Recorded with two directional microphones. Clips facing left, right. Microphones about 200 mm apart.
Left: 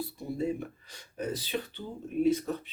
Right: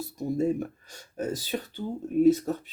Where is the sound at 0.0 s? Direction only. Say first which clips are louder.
Right 5 dB; 45° right (ahead or behind).